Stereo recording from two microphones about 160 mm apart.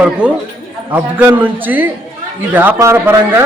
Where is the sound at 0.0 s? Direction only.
5° right (ahead or behind).